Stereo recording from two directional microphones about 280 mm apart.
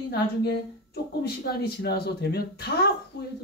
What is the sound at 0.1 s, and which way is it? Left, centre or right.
Speech, left.